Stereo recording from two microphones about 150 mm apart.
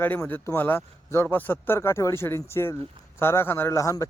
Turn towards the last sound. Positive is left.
turn(degrees=20)  # may be behind; listen again after turning